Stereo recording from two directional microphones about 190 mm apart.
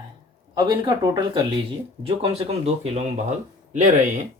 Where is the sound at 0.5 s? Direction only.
20° right (ahead or behind).